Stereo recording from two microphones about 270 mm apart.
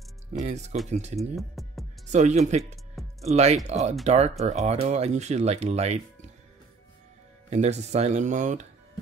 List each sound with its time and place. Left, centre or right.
0.3 s speech: right
1.3 s music: centre
2.0 s speech: right
7.4 s speech: right